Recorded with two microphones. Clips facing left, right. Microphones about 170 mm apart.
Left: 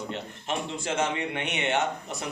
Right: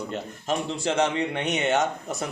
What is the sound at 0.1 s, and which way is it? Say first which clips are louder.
A man's voice: right 4 dB; 40° right (ahead or behind).